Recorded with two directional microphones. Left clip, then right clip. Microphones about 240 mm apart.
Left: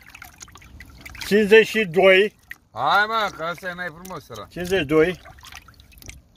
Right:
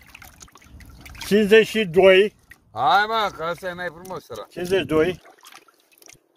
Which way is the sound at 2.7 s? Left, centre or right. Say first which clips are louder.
Right 1 dB; right.